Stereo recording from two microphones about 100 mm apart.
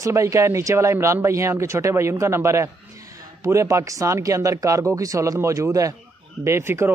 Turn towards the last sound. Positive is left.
turn(degrees=-25)  # may be behind; listen again after turning